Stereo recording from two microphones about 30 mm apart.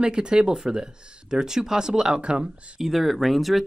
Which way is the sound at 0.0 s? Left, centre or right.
Right.